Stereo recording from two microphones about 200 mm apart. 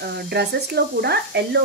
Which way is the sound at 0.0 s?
55° right (ahead or behind).